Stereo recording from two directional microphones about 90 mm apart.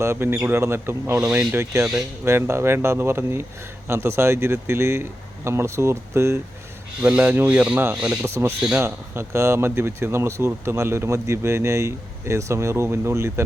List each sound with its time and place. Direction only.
0.0 s speech: 30° right (ahead or behind)
1.2 s speech: 10° right (ahead or behind)
2.2 s speech: 30° right (ahead or behind)
7.0 s speech: 15° right (ahead or behind)
7.9 s speech: 10° right (ahead or behind)
8.2 s speech: 30° right (ahead or behind)